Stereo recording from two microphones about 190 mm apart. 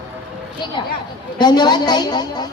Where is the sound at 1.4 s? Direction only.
20° left (ahead or behind).